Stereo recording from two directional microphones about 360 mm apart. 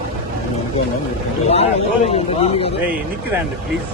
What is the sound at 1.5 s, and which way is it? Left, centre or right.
Speech, centre.